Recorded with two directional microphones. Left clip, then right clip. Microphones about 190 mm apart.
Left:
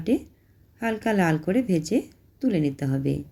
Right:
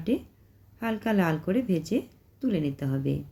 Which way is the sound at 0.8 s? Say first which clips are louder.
Left 4 dB; 20° left (ahead or behind).